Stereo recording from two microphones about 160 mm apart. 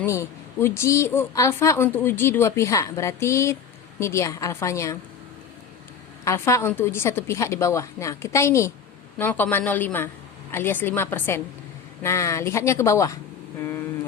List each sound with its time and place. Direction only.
0.0 s a woman's voice: 20° left (ahead or behind)
6.2 s a woman's voice: 15° left (ahead or behind)
13.6 s vehicle: 15° left (ahead or behind)